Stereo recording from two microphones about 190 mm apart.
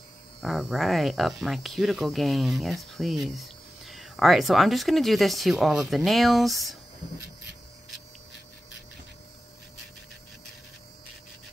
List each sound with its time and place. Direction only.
0.4 s speech: centre (ahead or behind)